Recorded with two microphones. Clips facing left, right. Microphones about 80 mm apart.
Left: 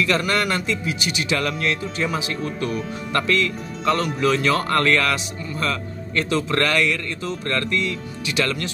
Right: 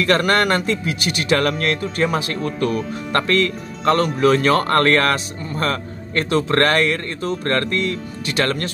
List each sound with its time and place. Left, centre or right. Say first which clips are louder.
0.0 s speech: right 4 dB; right